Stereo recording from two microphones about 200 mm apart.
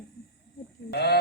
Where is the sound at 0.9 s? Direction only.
55° left (ahead or behind).